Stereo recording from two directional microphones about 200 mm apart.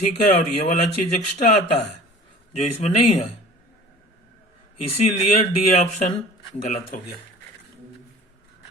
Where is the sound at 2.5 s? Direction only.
35° left (ahead or behind).